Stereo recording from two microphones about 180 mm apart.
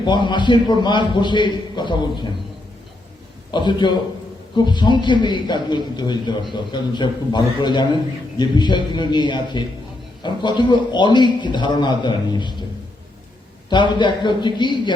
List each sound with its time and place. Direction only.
0.0 s a man's voice: 25° left (ahead or behind)
3.5 s a man's voice: 25° left (ahead or behind)
13.7 s a man's voice: 25° left (ahead or behind)